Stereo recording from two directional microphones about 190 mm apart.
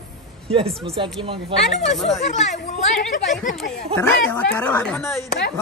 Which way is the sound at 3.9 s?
10° left (ahead or behind).